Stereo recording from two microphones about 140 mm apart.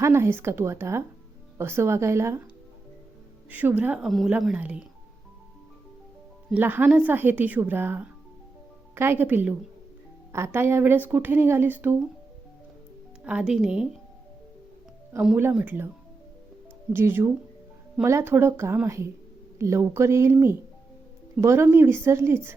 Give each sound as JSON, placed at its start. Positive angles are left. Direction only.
{"t": 0.0, "sound": "speech", "side_deg": -20}
{"t": 3.5, "sound": "speech", "side_deg": -10}
{"t": 6.5, "sound": "speech", "side_deg": -15}
{"t": 13.2, "sound": "speech", "side_deg": -5}
{"t": 15.4, "sound": "speech", "side_deg": -15}
{"t": 16.9, "sound": "speech", "side_deg": -15}